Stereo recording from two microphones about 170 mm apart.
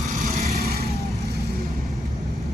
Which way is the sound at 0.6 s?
65° right (ahead or behind).